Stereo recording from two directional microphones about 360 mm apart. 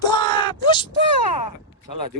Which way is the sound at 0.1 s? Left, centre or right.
Centre.